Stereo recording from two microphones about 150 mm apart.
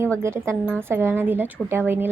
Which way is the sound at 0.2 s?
20° right (ahead or behind).